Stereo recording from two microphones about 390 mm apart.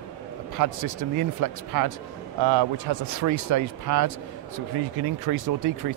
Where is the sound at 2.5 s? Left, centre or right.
Right.